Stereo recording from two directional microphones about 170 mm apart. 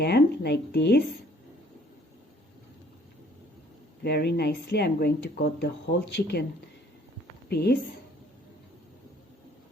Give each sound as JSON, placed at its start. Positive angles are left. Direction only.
{"t": 0.0, "sound": "speech", "side_deg": 75}
{"t": 4.0, "sound": "speech", "side_deg": 75}
{"t": 7.5, "sound": "speech", "side_deg": 75}